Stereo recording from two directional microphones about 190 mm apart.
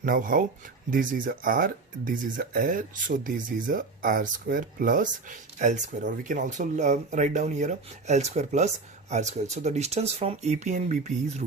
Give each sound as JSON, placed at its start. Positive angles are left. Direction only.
{"t": 0.0, "sound": "speech", "side_deg": -45}